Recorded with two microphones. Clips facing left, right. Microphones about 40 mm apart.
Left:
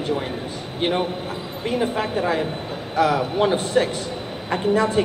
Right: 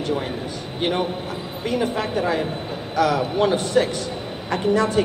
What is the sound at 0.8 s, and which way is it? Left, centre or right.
A man's voice, centre.